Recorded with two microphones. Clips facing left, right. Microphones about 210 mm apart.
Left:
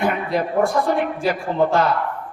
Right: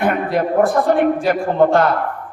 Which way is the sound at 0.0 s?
50° right (ahead or behind).